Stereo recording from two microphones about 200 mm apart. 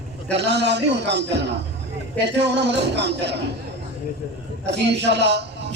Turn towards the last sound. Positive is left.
turn(degrees=-60)  # may be behind; listen again after turning